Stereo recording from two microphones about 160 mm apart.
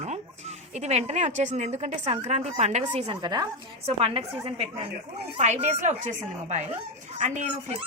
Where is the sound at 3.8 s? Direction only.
35° right (ahead or behind).